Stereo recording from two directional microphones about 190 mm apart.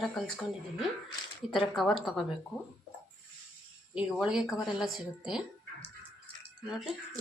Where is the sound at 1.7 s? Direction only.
Centre (ahead or behind).